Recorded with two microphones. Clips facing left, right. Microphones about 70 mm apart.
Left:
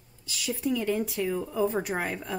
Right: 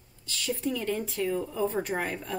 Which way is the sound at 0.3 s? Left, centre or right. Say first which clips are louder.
Left 1 dB; centre.